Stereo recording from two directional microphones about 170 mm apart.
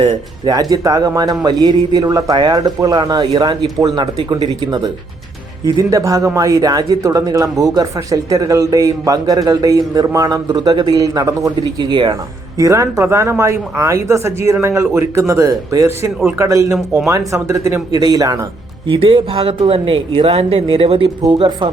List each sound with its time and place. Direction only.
0.4 s speech: 20° right (ahead or behind)